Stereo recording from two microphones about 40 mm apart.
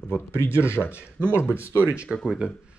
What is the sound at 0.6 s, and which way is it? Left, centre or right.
Speech, left.